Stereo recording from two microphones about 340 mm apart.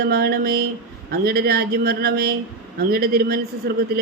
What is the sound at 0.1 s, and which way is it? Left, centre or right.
A man's voice, right.